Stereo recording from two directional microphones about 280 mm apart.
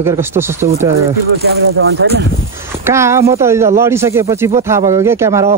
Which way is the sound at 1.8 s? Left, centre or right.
Right.